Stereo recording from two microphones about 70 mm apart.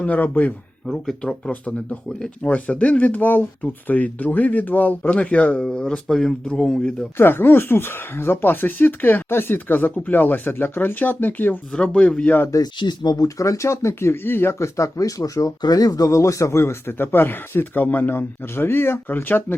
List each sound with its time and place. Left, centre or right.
0.0 s speech: left
0.9 s speech: centre
1.3 s speech: centre
2.5 s speech: left
5.6 s speech: centre
7.2 s speech: left
11.7 s speech: centre
12.6 s speech: left
14.1 s speech: left
14.6 s speech: left